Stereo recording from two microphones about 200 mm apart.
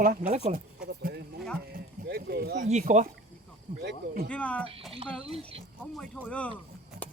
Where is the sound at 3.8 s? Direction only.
50° right (ahead or behind).